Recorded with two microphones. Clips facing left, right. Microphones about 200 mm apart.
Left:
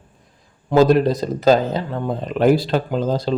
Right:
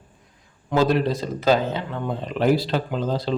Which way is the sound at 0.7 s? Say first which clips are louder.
Left 6 dB; 40° left (ahead or behind).